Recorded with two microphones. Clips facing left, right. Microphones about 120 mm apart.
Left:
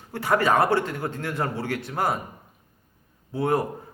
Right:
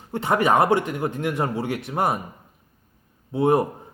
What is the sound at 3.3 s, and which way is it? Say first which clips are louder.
Speech: right 5 dB; 20° right (ahead or behind).